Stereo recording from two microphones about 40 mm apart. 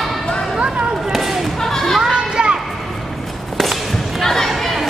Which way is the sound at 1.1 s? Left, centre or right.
Centre.